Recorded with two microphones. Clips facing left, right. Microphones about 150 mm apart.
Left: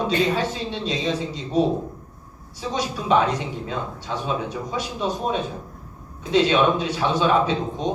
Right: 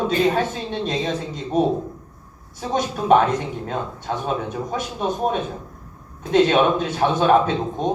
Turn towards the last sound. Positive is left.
turn(degrees=-50)  # may be behind; listen again after turning